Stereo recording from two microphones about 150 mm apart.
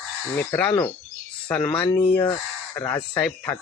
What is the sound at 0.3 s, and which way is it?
Speech, 10° left (ahead or behind).